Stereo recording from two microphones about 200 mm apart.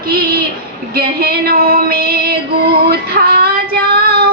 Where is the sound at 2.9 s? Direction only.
50° right (ahead or behind).